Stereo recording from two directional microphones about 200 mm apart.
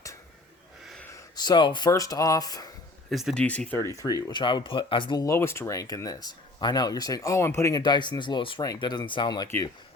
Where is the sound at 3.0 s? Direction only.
Centre (ahead or behind).